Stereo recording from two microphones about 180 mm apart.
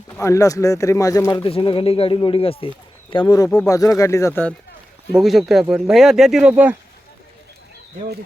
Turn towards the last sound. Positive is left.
turn(degrees=-5)  # may be behind; listen again after turning